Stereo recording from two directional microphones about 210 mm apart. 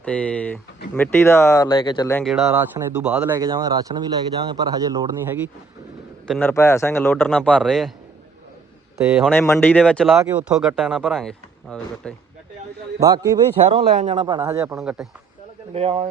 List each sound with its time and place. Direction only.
0.0 s speech: 5° left (ahead or behind)
2.1 s a man's voice: centre (ahead or behind); by 5.4 s 15° right (ahead or behind)
6.2 s a man's voice: centre (ahead or behind)
6.5 s speech: 15° left (ahead or behind)
9.3 s speech: 10° left (ahead or behind)
13.0 s a man's voice: 15° right (ahead or behind)
13.7 s a man's voice: 30° right (ahead or behind)
14.2 s a man's voice: 20° right (ahead or behind)
14.6 s speech: 5° right (ahead or behind)
15.7 s a man's voice: 30° right (ahead or behind)